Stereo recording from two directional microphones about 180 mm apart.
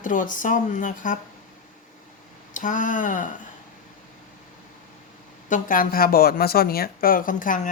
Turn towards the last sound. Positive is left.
turn(degrees=50)  # may be behind; listen again after turning